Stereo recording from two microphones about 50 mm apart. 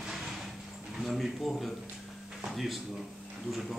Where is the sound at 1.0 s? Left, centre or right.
Centre.